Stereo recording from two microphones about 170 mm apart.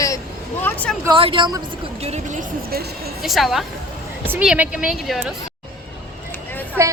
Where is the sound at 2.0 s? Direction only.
45° right (ahead or behind).